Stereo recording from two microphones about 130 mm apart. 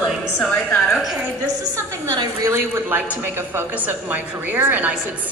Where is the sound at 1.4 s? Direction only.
30° right (ahead or behind); by 5.0 s 15° right (ahead or behind).